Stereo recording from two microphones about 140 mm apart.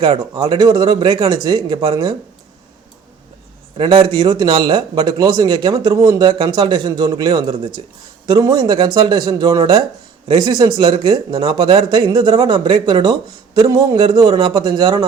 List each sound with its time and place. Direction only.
0.0 s a man's voice: 35° right (ahead or behind)
3.8 s a man's voice: 35° right (ahead or behind)